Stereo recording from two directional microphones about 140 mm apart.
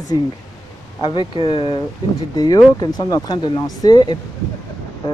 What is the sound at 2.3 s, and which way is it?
Speech, 25° left (ahead or behind).